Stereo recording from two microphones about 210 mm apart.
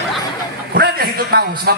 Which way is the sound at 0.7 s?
45° right (ahead or behind).